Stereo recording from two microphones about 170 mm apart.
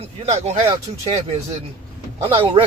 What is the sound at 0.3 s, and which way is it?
Speech, 40° right (ahead or behind).